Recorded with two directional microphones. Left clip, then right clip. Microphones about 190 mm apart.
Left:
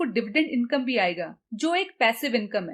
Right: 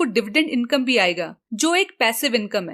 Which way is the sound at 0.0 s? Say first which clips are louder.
Right 5 dB; 40° right (ahead or behind).